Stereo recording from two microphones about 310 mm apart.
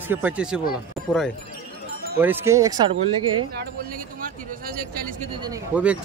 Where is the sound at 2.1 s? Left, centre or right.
Centre.